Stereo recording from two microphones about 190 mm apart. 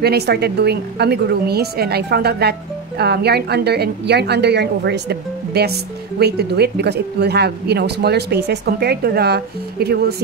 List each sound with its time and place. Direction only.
0.0 s a woman's voice: 60° right (ahead or behind)